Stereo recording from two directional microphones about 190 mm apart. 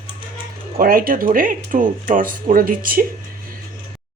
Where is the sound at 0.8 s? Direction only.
50° right (ahead or behind).